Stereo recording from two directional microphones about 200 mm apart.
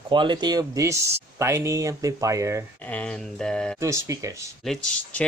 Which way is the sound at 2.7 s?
5° left (ahead or behind).